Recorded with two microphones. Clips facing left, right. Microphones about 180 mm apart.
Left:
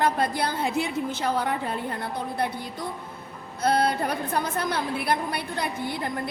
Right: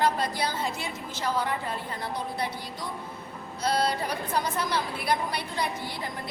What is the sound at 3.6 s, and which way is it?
A woman's voice, 55° left (ahead or behind).